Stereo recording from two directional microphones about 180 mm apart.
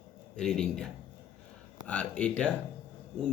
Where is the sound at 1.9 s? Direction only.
5° left (ahead or behind).